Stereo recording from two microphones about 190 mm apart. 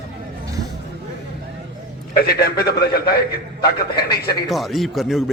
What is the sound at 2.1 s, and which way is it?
Speech, 55° left (ahead or behind).